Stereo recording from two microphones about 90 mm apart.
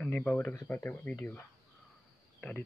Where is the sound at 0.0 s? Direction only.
15° left (ahead or behind).